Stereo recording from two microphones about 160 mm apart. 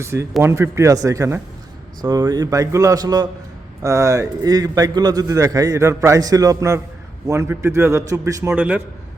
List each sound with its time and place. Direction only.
0.0 s a man's voice: 15° right (ahead or behind)